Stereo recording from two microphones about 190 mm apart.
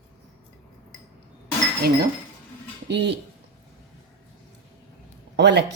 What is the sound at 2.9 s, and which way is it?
Speech, 65° right (ahead or behind).